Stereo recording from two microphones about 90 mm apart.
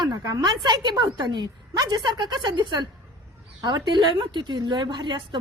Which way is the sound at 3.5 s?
50° right (ahead or behind).